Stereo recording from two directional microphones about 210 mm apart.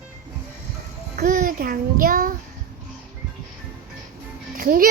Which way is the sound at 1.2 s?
35° right (ahead or behind).